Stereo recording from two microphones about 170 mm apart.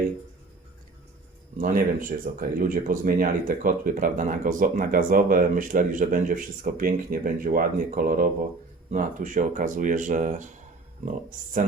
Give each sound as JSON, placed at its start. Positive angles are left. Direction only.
{"t": 1.5, "sound": "speech", "side_deg": -55}